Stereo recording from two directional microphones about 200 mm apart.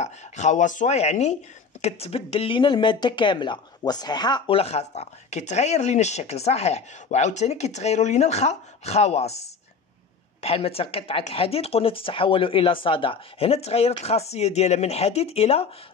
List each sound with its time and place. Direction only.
0.0 s speech: 35° left (ahead or behind)
10.4 s speech: 30° left (ahead or behind)